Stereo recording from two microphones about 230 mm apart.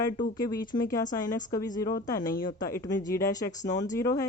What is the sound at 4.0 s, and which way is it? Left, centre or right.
Speech, centre.